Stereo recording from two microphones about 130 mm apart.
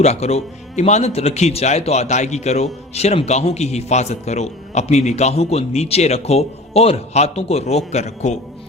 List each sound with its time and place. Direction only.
0.0 s a man's voice: 55° left (ahead or behind)